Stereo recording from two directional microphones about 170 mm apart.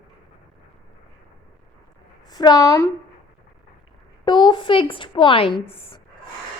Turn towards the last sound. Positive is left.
turn(degrees=35)  # may be behind; listen again after turning